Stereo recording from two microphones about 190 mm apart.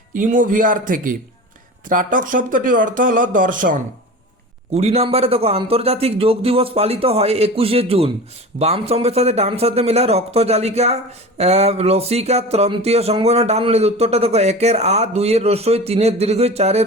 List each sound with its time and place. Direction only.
0.2 s speech: 45° right (ahead or behind)
4.7 s speech: 35° right (ahead or behind)